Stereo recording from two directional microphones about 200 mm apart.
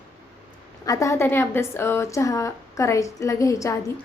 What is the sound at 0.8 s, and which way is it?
A woman's voice, 15° left (ahead or behind).